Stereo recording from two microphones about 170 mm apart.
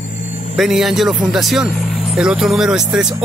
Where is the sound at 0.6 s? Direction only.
Centre (ahead or behind).